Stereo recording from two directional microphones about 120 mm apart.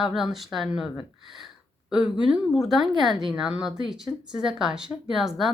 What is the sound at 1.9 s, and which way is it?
A woman's voice, 5° right (ahead or behind).